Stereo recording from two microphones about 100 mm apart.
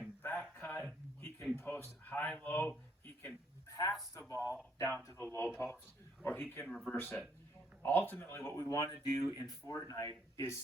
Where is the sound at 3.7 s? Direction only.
35° left (ahead or behind).